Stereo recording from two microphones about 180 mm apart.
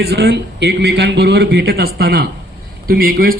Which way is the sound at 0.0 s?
65° right (ahead or behind).